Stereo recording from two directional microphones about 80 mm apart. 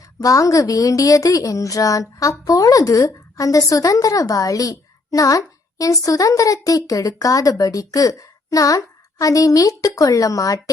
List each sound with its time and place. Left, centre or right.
0.2 s a woman's voice: left